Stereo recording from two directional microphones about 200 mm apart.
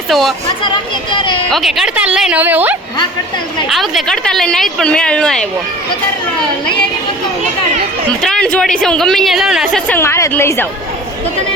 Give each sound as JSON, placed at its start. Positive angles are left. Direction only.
{"t": 0.1, "sound": "a woman's voice", "side_deg": 0}
{"t": 1.1, "sound": "speech", "side_deg": 25}
{"t": 1.5, "sound": "a woman's voice", "side_deg": 0}
{"t": 8.2, "sound": "a woman's voice", "side_deg": 5}
{"t": 9.9, "sound": "a woman's voice", "side_deg": 10}